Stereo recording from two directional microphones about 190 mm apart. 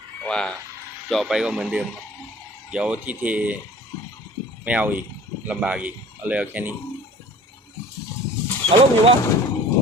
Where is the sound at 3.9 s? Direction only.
20° left (ahead or behind).